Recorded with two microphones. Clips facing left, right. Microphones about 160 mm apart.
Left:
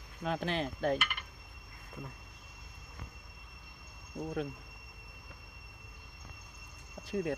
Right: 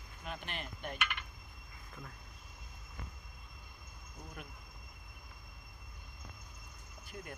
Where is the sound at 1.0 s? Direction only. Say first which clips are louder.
Even; 10° left (ahead or behind).